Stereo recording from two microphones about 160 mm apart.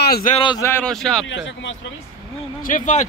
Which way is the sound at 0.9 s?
5° left (ahead or behind).